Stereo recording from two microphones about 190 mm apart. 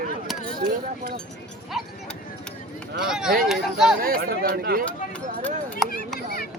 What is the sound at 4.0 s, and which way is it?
Speech, 50° right (ahead or behind).